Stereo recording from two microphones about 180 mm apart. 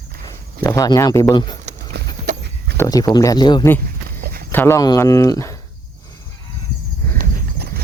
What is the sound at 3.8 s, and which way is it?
Walk, 55° right (ahead or behind).